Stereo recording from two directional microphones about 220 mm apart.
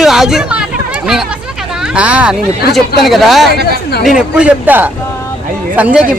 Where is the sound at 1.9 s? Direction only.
5° right (ahead or behind).